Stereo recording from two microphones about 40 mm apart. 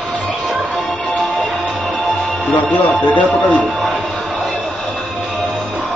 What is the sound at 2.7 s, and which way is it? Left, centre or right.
Speech, left.